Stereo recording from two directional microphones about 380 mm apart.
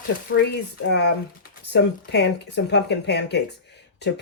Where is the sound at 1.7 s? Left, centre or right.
Left.